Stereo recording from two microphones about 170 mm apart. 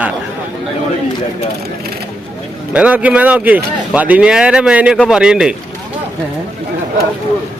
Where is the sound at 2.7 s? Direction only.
5° right (ahead or behind).